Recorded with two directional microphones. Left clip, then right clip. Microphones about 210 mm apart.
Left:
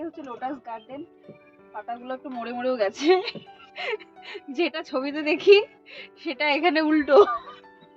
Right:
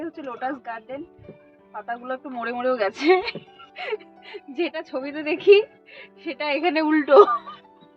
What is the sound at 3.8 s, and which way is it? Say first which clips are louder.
A woman's voice: even; 35° left (ahead or behind).